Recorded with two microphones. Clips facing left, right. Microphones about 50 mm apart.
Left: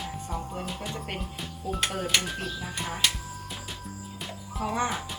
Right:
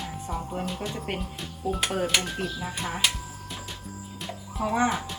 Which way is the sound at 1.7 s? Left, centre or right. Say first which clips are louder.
Right 2 dB; centre.